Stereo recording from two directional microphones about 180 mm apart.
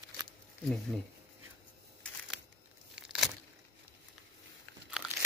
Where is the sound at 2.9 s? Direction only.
5° right (ahead or behind).